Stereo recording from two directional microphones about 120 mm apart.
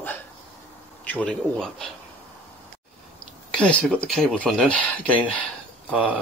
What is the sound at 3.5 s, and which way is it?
Speech, 10° left (ahead or behind).